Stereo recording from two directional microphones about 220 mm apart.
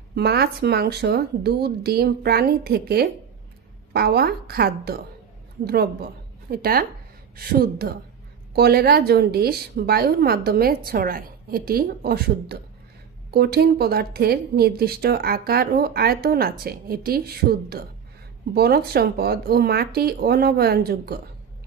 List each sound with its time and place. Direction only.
0.1 s speech: 45° right (ahead or behind)